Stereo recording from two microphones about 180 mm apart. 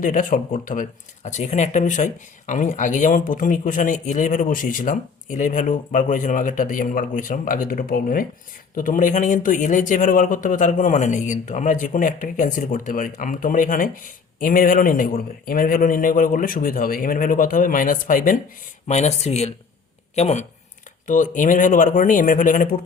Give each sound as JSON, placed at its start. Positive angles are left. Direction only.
{"t": 0.0, "sound": "speech", "side_deg": 50}